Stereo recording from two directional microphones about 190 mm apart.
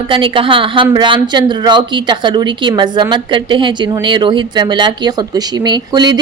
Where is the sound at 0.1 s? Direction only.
25° right (ahead or behind).